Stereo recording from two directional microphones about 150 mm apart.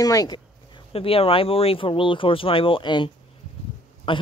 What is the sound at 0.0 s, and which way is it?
Speech, 25° left (ahead or behind).